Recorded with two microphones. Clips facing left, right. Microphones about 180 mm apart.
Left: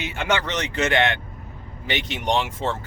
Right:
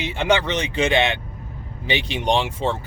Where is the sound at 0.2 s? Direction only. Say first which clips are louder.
Right 4 dB; 15° right (ahead or behind).